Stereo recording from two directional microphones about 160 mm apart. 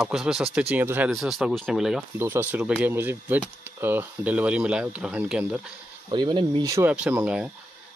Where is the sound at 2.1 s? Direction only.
15° right (ahead or behind).